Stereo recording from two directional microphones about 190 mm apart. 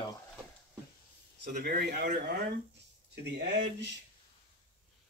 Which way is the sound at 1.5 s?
55° right (ahead or behind).